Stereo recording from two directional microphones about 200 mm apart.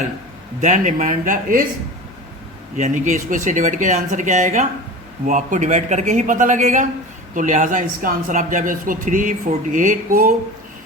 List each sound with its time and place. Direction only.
0.6 s speech: 40° right (ahead or behind)
2.7 s speech: 40° right (ahead or behind)